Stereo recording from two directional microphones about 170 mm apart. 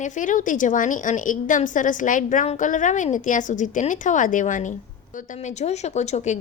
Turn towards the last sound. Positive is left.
turn(degrees=40)  # may be behind; listen again after turning